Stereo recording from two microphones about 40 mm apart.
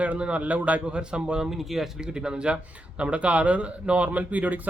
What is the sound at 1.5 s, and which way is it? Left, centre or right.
Speech, centre.